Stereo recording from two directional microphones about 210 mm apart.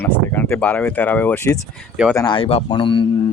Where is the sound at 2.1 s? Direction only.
20° left (ahead or behind).